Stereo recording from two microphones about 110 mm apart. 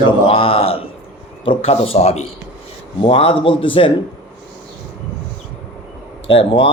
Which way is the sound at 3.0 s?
55° left (ahead or behind).